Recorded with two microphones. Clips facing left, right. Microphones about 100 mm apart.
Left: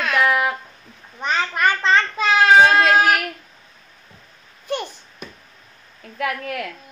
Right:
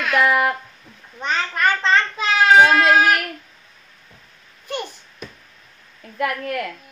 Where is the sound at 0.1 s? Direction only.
Centre (ahead or behind).